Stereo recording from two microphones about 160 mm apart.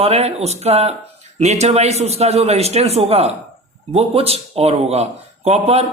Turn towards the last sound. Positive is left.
turn(degrees=-40)  # may be behind; listen again after turning